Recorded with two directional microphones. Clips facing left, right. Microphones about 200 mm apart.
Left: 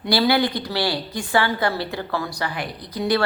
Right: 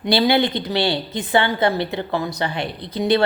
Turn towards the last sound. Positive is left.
turn(degrees=-25)  # may be behind; listen again after turning